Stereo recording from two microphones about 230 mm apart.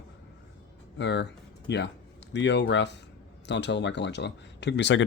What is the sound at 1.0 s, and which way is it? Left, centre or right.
Speech, left.